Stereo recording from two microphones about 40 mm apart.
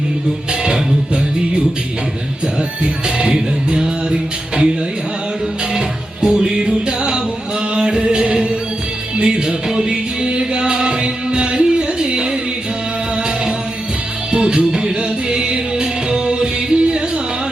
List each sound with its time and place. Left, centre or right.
0.6 s music: right
6.2 s music: centre
14.3 s music: right